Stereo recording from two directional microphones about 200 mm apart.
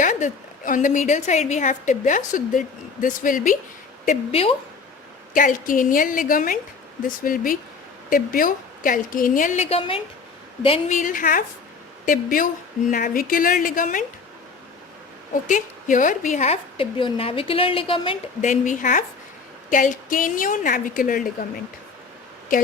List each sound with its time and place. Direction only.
0.0 s a woman's voice: 40° left (ahead or behind)
5.3 s a woman's voice: 40° left (ahead or behind)
15.4 s a woman's voice: 40° left (ahead or behind)
18.4 s a woman's voice: 40° left (ahead or behind)